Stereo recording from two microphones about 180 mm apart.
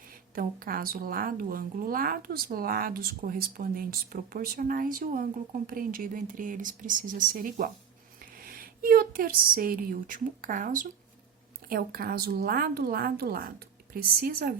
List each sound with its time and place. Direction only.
0.3 s a woman's voice: 55° right (ahead or behind)